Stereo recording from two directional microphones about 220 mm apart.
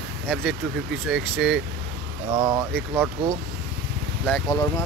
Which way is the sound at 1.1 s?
5° right (ahead or behind).